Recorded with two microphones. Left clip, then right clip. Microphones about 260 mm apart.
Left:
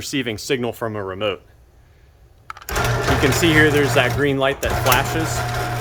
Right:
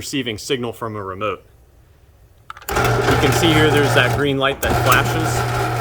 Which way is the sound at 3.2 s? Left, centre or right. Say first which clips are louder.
Left 3 dB; centre.